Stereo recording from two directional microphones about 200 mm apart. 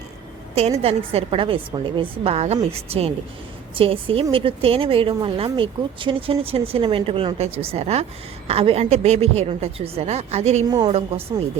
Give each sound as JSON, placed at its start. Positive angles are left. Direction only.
{"t": 0.8, "sound": "a woman's voice", "side_deg": -30}
{"t": 10.7, "sound": "a woman's voice", "side_deg": -20}